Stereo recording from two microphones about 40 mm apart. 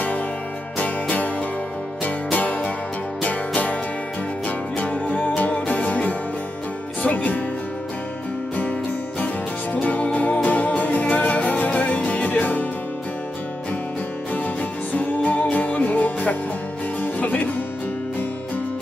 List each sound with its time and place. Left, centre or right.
0.7 s music: left
2.3 s music: left
5.1 s music: left
9.8 s music: left
15.0 s music: left